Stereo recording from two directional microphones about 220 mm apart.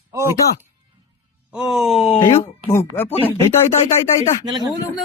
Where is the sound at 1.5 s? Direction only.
Centre (ahead or behind).